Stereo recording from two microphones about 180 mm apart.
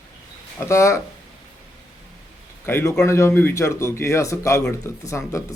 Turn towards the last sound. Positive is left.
turn(degrees=15)  # may be behind; listen again after turning